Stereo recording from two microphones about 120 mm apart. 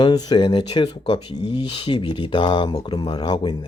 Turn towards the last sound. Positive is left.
turn(degrees=40)  # may be behind; listen again after turning